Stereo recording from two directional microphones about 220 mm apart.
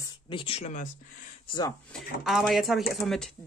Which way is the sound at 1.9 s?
Centre (ahead or behind).